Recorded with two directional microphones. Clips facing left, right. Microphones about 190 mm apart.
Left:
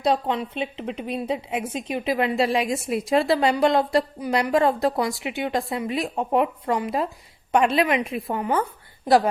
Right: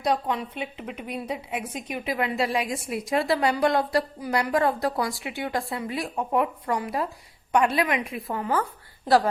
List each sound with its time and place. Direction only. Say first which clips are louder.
0.0 s a woman's voice: left 3 dB; 25° left (ahead or behind)